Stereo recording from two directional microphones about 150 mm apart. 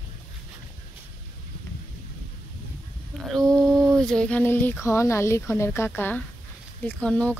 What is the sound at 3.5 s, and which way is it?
A woman's voice, 5° left (ahead or behind).